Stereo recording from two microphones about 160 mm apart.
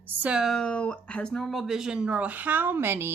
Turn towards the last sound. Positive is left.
turn(degrees=-15)  # may be behind; listen again after turning